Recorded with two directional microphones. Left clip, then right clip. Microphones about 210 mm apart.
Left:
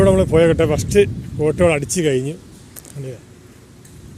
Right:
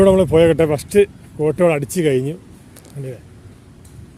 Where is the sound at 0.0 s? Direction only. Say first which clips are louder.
Right 2 dB; 15° right (ahead or behind).